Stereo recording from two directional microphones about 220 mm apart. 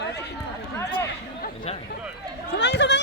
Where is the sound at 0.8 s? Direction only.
15° left (ahead or behind).